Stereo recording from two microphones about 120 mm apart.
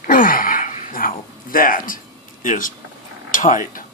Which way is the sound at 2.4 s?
90° left.